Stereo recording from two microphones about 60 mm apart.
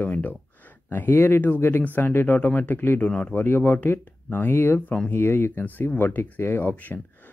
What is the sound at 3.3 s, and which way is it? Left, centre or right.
Speech, left.